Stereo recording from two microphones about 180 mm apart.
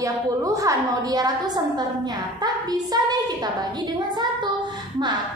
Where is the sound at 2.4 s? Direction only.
20° right (ahead or behind).